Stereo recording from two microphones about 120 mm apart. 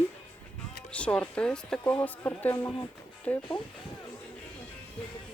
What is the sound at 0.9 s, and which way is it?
Speech, 10° left (ahead or behind).